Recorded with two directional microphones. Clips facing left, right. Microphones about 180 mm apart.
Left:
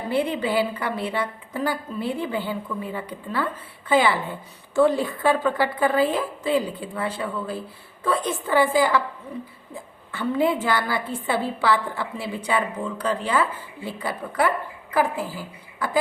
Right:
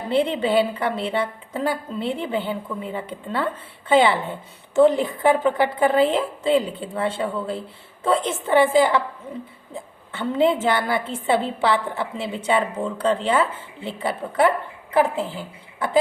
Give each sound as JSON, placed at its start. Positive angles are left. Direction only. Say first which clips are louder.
{"t": 0.1, "sound": "a woman's voice", "louder": "right 4 dB", "side_deg": -25}